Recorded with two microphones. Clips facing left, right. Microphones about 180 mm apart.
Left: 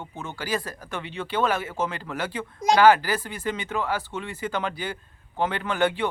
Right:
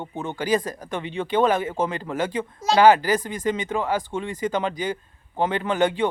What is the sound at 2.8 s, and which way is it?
A man's voice, 20° right (ahead or behind).